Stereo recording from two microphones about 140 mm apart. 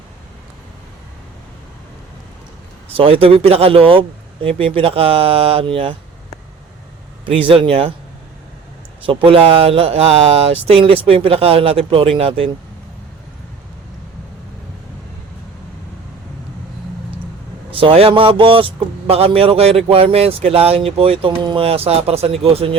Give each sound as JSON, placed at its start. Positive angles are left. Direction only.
{"t": 2.9, "sound": "a man's voice", "side_deg": -40}
{"t": 7.3, "sound": "speech", "side_deg": -40}
{"t": 9.0, "sound": "a man's voice", "side_deg": -40}
{"t": 17.7, "sound": "a man's voice", "side_deg": -40}